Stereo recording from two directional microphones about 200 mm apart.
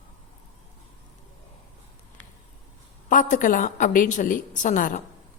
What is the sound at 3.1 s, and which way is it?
A woman's voice, 40° left (ahead or behind).